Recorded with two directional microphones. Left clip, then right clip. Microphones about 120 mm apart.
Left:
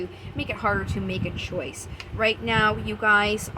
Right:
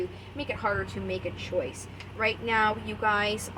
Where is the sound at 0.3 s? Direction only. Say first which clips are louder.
Left 4 dB; 60° left (ahead or behind).